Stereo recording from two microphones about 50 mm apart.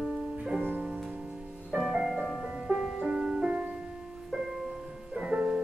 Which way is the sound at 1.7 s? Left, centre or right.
Centre.